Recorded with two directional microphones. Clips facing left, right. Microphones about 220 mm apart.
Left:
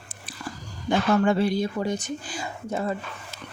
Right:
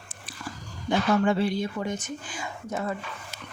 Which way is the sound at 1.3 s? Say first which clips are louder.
Left 2 dB; 40° left (ahead or behind).